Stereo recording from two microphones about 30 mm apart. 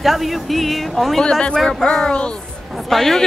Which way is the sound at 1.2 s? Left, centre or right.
Left.